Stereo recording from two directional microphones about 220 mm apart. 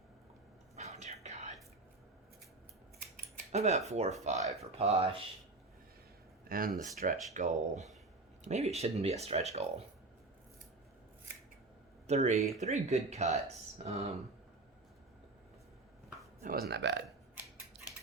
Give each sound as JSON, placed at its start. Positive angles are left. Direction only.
{"t": 0.8, "sound": "whispering", "side_deg": -30}
{"t": 3.5, "sound": "speech", "side_deg": -30}
{"t": 6.5, "sound": "speech", "side_deg": -40}
{"t": 12.0, "sound": "speech", "side_deg": -30}
{"t": 16.4, "sound": "speech", "side_deg": -40}
{"t": 17.7, "sound": "scissors", "side_deg": -50}